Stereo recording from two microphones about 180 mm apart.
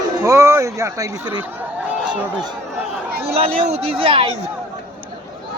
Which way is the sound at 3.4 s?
30° right (ahead or behind).